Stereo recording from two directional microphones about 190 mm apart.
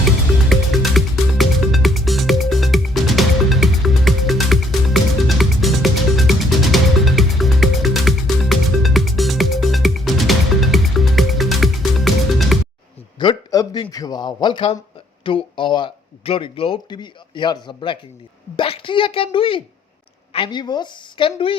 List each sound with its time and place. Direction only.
0.4 s music: centre (ahead or behind)
13.1 s a sound: 20° left (ahead or behind)
13.8 s a man's voice: 20° left (ahead or behind)